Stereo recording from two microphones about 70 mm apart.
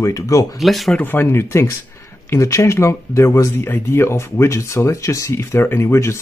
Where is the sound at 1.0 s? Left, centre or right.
Left.